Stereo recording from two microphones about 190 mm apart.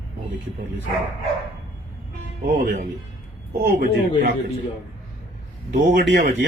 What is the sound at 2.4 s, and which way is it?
Speech, 55° right (ahead or behind).